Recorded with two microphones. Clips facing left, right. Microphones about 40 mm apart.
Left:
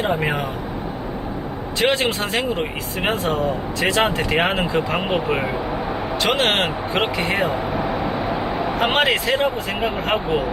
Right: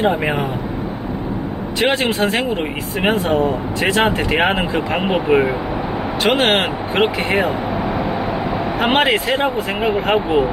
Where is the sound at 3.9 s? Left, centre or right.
Centre.